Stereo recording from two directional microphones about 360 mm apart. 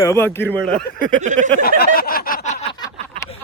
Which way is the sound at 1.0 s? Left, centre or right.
Centre.